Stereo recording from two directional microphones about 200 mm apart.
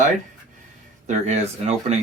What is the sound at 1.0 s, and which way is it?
Speech, 35° right (ahead or behind).